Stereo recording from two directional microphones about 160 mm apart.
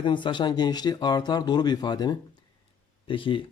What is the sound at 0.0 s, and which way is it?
A man's voice, 30° left (ahead or behind).